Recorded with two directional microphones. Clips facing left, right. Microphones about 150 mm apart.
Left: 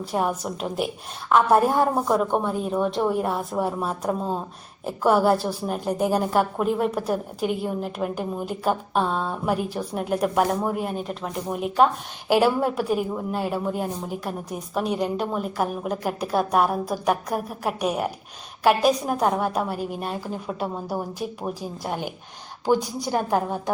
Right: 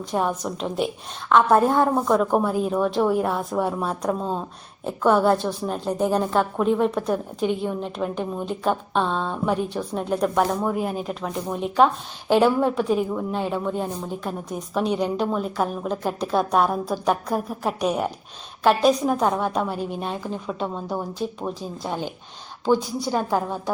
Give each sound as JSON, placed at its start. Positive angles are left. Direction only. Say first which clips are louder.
{"t": 0.0, "sound": "a woman's voice", "louder": "right 1 dB", "side_deg": 10}
{"t": 2.2, "sound": "a woman's voice", "louder": "right 3 dB", "side_deg": -5}